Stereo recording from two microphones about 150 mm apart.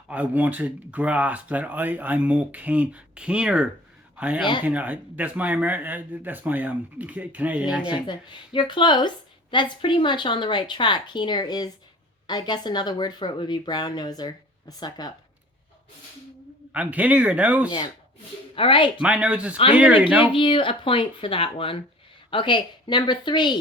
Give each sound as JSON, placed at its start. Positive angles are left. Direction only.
{"t": 0.1, "sound": "speech", "side_deg": -10}
{"t": 7.9, "sound": "a woman's voice", "side_deg": 30}
{"t": 16.7, "sound": "speech", "side_deg": -10}
{"t": 17.7, "sound": "a woman's voice", "side_deg": 35}
{"t": 19.0, "sound": "speech", "side_deg": -10}
{"t": 20.3, "sound": "a woman's voice", "side_deg": 35}